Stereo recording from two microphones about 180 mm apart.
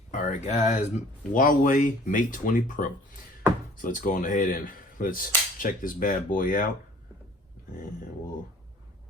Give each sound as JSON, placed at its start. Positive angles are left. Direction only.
{"t": 0.1, "sound": "speech", "side_deg": 45}